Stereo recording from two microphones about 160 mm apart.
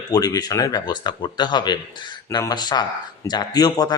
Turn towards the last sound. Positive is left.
turn(degrees=25)  # may be behind; listen again after turning